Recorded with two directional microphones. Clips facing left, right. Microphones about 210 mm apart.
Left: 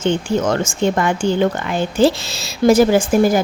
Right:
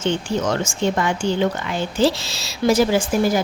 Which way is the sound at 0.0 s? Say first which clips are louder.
Left 4 dB; 50° left (ahead or behind).